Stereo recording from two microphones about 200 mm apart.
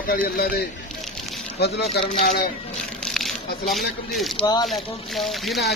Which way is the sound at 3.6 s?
Centre (ahead or behind).